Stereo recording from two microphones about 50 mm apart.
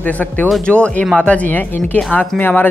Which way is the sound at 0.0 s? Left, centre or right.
Left.